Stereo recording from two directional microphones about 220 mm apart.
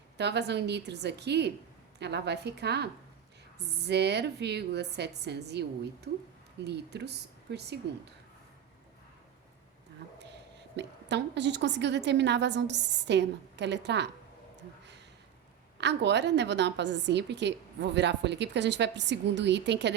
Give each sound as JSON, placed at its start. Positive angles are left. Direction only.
{"t": 0.2, "sound": "a woman's voice", "side_deg": -50}
{"t": 6.7, "sound": "a woman's voice", "side_deg": -50}
{"t": 10.2, "sound": "a woman's voice", "side_deg": -50}
{"t": 15.8, "sound": "a woman's voice", "side_deg": -50}